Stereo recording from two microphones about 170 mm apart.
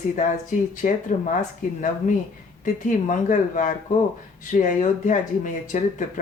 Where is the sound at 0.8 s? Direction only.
50° left (ahead or behind).